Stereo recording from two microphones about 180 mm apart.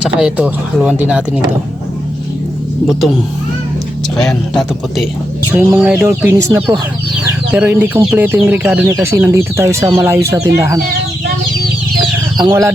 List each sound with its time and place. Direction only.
0.0 s speech: 5° right (ahead or behind)
4.3 s speech: centre (ahead or behind)
5.5 s speech: 10° right (ahead or behind)
12.4 s speech: 20° right (ahead or behind)